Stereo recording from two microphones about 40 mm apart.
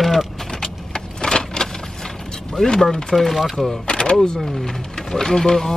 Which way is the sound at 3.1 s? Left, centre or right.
Centre.